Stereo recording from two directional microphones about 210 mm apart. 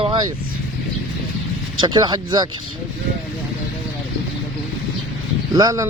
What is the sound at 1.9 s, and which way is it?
Speech, 20° right (ahead or behind).